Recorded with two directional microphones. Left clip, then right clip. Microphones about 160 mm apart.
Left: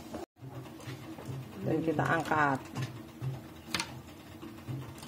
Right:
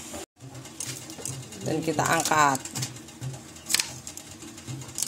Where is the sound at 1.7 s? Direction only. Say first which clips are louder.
Right 5 dB; 25° right (ahead or behind).